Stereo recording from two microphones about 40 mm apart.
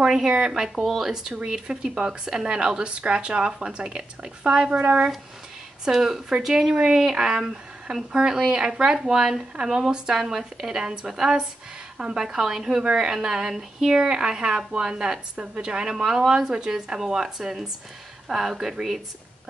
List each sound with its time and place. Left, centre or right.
0.0 s speech: centre
0.7 s speech: centre
1.1 s speech: centre
4.6 s speech: right
5.9 s speech: centre